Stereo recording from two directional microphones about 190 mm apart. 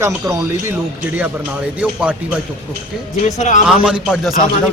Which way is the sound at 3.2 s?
40° left (ahead or behind).